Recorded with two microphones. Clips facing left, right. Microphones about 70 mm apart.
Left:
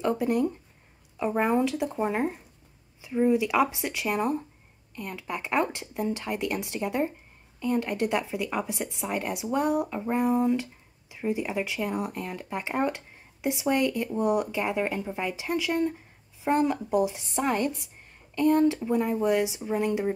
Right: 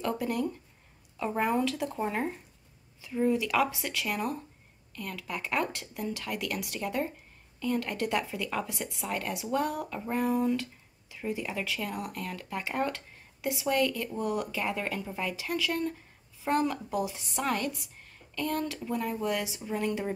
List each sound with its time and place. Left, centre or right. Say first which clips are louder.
0.0 s speech: left 5 dB; left